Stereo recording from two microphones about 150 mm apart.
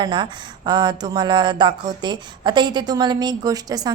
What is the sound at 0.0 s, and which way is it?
Speech, 30° right (ahead or behind).